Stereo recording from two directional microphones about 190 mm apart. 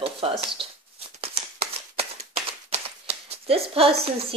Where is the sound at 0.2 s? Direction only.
30° right (ahead or behind).